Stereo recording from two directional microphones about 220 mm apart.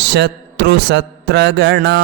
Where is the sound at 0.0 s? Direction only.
50° right (ahead or behind).